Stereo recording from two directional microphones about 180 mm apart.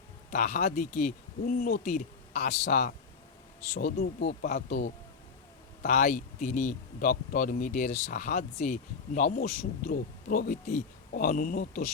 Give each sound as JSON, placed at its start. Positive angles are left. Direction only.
{"t": 0.3, "sound": "speech", "side_deg": 45}